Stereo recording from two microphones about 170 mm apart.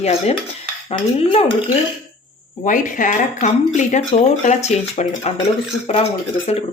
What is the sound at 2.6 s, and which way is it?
Speech, 50° left (ahead or behind).